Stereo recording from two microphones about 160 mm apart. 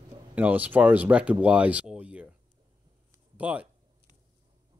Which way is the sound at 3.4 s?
10° right (ahead or behind).